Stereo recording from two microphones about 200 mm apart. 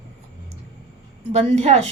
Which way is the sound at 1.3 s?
35° right (ahead or behind).